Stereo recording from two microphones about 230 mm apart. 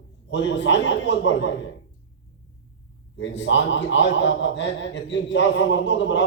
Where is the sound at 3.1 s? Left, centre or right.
Left.